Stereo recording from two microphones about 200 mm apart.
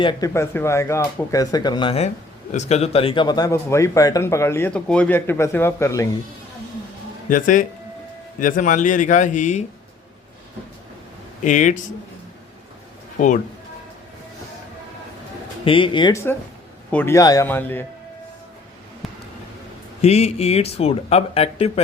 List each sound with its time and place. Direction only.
0.0 s speech: 25° left (ahead or behind)
0.3 s speech: 15° left (ahead or behind)
7.3 s speech: 40° left (ahead or behind)
11.4 s speech: 40° left (ahead or behind)
13.1 s speech: 40° left (ahead or behind)
15.6 s speech: 25° left (ahead or behind)
16.9 s speech: 10° left (ahead or behind)
20.0 s speech: 30° left (ahead or behind)